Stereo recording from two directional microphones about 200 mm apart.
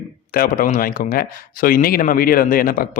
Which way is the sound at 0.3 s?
45° left (ahead or behind).